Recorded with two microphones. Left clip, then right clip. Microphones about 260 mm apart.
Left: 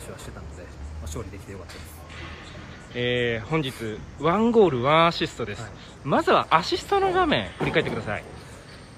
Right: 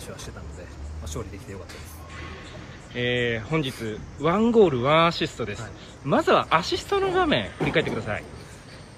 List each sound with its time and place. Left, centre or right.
1.1 s speech: centre
2.9 s speech: centre